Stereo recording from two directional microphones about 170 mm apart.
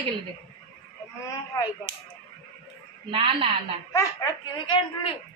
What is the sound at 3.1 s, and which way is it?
Speech, 35° right (ahead or behind).